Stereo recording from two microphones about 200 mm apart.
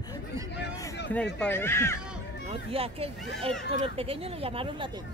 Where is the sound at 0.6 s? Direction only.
60° left (ahead or behind).